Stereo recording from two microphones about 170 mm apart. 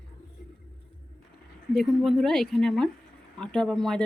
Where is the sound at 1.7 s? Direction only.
Centre (ahead or behind).